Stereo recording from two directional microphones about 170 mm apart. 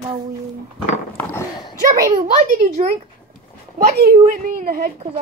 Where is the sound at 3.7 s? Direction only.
50° right (ahead or behind).